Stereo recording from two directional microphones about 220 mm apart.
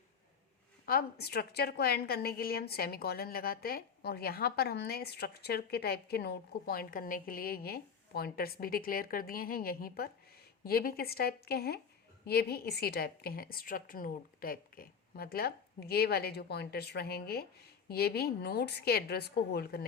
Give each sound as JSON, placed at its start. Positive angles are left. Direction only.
{"t": 0.9, "sound": "a woman's voice", "side_deg": 45}